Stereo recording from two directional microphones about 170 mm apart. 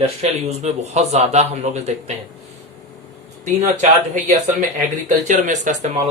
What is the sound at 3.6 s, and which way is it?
Speech, 45° right (ahead or behind).